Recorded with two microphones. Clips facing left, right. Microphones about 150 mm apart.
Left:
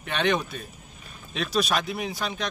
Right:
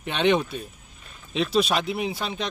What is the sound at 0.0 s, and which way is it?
Speech, 25° right (ahead or behind).